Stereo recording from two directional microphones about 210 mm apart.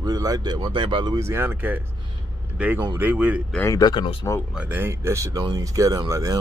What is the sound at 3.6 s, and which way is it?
Speech, 15° left (ahead or behind).